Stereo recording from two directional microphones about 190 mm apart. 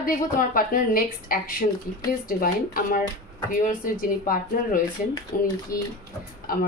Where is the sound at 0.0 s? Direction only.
45° left (ahead or behind).